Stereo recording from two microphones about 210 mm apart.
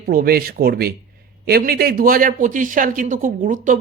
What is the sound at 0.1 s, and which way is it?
A man's voice, 45° right (ahead or behind).